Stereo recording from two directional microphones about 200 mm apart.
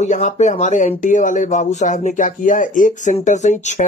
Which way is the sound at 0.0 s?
35° left (ahead or behind).